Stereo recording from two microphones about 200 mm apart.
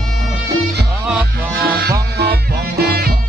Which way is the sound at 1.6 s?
50° right (ahead or behind).